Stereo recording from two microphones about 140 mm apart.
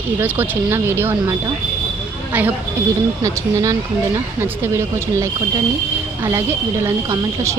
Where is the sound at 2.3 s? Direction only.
10° right (ahead or behind).